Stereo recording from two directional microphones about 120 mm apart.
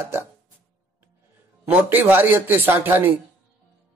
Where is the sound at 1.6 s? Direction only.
15° right (ahead or behind).